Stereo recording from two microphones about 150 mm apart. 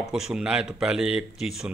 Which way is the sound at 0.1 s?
5° right (ahead or behind).